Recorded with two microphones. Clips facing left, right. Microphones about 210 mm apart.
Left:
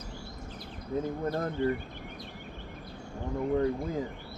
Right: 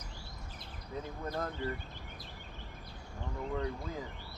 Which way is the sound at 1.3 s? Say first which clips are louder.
Left 6 dB; 50° left (ahead or behind).